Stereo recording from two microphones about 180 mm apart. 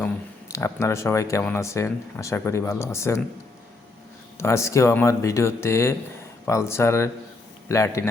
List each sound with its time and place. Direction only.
0.0 s speech: 15° left (ahead or behind)
4.4 s speech: 15° left (ahead or behind)